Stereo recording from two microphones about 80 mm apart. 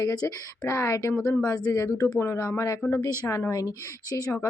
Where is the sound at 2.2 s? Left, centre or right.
Left.